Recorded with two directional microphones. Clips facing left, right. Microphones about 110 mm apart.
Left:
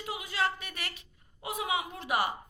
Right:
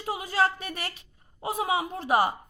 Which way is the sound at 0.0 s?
40° right (ahead or behind).